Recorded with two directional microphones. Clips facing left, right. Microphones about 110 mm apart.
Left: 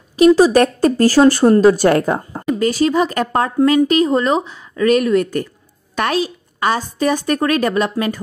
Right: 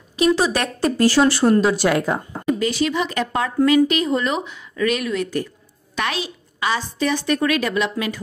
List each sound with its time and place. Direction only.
0.1 s speech: 40° left (ahead or behind)